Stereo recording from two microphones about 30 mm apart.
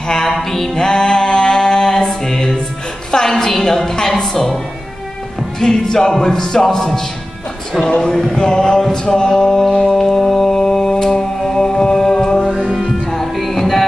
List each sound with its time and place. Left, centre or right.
0.3 s a woman's voice: centre
0.7 s music: left
3.1 s a sound: centre
4.1 s a woman's voice: centre
5.6 s a sound: centre
6.6 s a woman's voice: centre
7.8 s a sound: left
9.9 s music: centre
12.6 s music: centre
13.5 s music: centre